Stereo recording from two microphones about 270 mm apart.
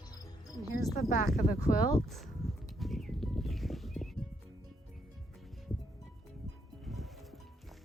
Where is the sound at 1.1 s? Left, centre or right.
Left.